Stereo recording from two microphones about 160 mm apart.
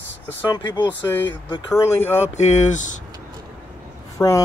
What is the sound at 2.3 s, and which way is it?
Speech, 45° left (ahead or behind).